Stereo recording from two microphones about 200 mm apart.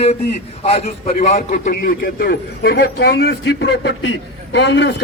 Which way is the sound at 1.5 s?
45° left (ahead or behind).